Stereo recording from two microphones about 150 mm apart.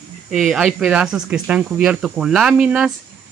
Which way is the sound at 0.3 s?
5° right (ahead or behind).